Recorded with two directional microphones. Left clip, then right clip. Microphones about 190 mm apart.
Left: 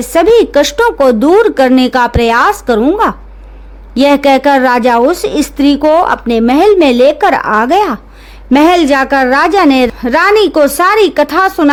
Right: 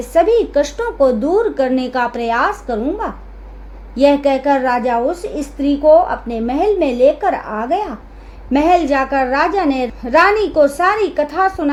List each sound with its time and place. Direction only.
0.0 s a woman's voice: 45° left (ahead or behind)